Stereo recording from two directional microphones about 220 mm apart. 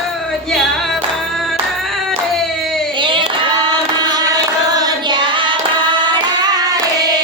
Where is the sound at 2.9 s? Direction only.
20° right (ahead or behind).